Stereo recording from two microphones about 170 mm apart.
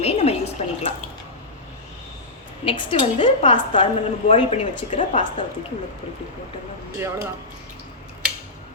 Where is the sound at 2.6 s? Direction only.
30° left (ahead or behind); by 5.4 s 45° left (ahead or behind).